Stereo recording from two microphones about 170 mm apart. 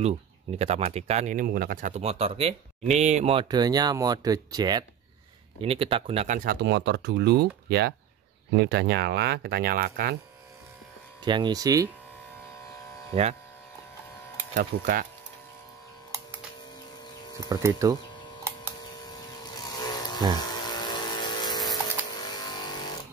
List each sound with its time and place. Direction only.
0.6 s speech: 40° right (ahead or behind)
3.4 s speech: 25° right (ahead or behind)
5.6 s speech: 35° right (ahead or behind)
6.2 s speech: 55° right (ahead or behind)
11.2 s speech: 25° right (ahead or behind)
13.1 s speech: 40° right (ahead or behind)
14.5 s speech: 55° right (ahead or behind)
17.4 s speech: 20° right (ahead or behind)
19.6 s vehicle: 20° left (ahead or behind)
20.6 s a sound: 25° left (ahead or behind)